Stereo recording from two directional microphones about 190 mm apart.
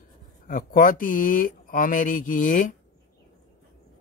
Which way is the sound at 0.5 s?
45° left (ahead or behind).